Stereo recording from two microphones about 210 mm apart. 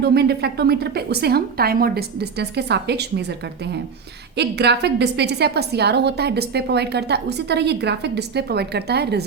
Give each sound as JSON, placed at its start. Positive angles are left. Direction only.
{"t": 0.0, "sound": "a woman's voice", "side_deg": -50}